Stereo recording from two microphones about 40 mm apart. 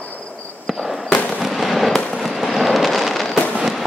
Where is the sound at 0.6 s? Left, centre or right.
Centre.